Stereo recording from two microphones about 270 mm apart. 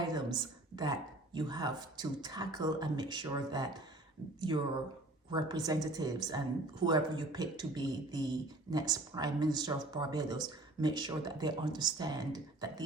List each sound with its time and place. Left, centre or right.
0.1 s speech: centre